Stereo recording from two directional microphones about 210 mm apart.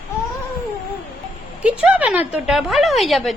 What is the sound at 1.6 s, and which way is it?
A woman's voice, 5° right (ahead or behind).